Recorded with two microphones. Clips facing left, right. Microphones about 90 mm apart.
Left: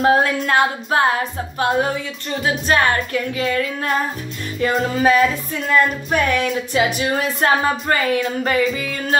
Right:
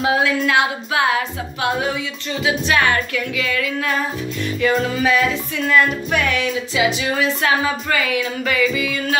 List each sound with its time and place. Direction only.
0.0 s music: 45° left (ahead or behind)